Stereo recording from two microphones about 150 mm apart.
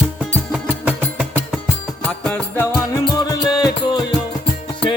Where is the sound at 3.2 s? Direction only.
25° left (ahead or behind).